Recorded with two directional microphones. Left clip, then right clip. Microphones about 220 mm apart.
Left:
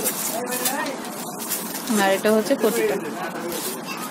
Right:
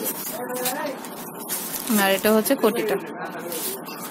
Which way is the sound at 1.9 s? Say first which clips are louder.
Left 1 dB; 20° right (ahead or behind).